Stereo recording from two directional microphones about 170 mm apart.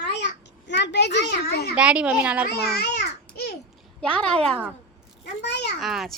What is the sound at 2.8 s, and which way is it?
Babbling, 70° left (ahead or behind).